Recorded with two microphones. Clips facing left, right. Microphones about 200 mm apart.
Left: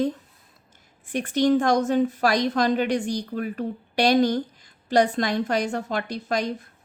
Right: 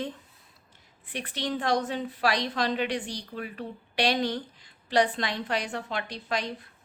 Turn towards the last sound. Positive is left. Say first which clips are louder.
# left 6 dB
turn(degrees=45)  # may be behind; listen again after turning